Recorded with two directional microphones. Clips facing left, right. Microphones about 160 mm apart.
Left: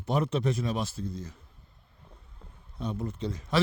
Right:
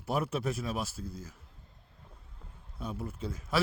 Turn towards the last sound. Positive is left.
turn(degrees=-5)  # may be behind; listen again after turning